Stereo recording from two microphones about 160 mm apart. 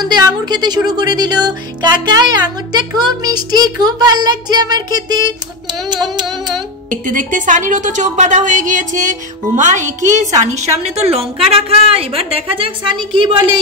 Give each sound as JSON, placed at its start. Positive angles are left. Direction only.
{"t": 0.0, "sound": "speech", "side_deg": -25}
{"t": 7.1, "sound": "a woman's voice", "side_deg": -55}